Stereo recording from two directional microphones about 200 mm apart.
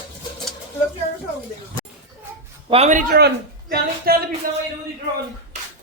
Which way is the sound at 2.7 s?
35° right (ahead or behind).